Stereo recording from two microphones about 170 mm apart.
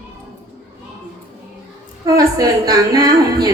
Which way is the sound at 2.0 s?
20° right (ahead or behind).